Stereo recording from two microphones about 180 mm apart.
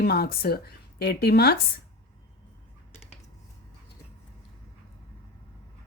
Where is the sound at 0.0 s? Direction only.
60° left (ahead or behind).